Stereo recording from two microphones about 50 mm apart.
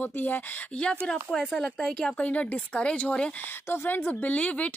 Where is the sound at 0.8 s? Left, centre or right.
Left.